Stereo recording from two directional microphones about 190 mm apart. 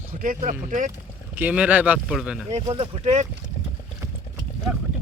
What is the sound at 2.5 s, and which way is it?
Speech, 30° right (ahead or behind).